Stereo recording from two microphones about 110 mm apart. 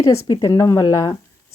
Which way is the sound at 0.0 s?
30° left (ahead or behind).